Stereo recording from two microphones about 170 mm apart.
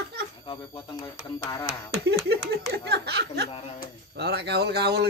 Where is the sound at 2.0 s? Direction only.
70° right (ahead or behind).